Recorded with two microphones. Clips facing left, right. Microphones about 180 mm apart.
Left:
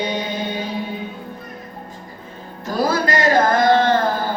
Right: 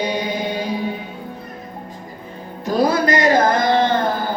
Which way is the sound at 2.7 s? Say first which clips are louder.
Right 3 dB; 20° right (ahead or behind).